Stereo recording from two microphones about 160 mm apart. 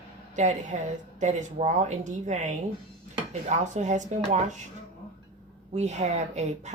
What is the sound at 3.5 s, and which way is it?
Speech, 50° right (ahead or behind).